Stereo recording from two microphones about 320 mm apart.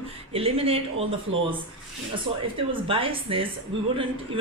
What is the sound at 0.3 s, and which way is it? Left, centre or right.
Speech, centre.